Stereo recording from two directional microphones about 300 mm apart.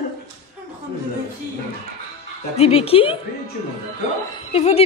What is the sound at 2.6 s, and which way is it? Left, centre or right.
Speech, centre.